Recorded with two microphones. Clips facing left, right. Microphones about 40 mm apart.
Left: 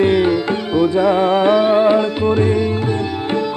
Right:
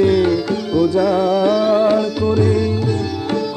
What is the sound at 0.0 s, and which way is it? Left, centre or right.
Music, left.